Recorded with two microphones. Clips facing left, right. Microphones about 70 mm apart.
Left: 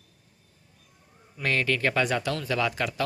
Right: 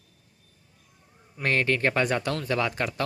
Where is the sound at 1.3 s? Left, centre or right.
Right.